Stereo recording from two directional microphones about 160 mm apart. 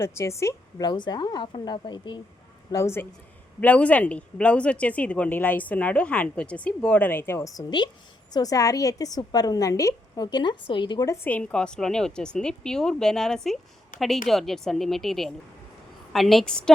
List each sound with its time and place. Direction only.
0.0 s a woman's voice: 15° left (ahead or behind)
2.7 s a woman's voice: 15° left (ahead or behind)